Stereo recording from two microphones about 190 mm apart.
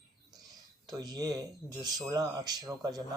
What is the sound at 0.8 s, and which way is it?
Speech, 20° right (ahead or behind).